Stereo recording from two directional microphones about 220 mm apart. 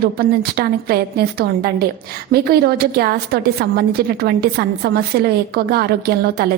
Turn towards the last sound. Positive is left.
turn(degrees=-45)  # may be behind; listen again after turning